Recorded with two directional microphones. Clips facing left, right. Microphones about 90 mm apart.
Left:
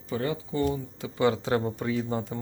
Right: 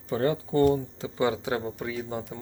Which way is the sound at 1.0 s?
15° right (ahead or behind).